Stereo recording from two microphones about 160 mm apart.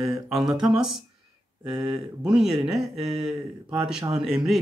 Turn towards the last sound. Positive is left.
turn(degrees=-5)  # may be behind; listen again after turning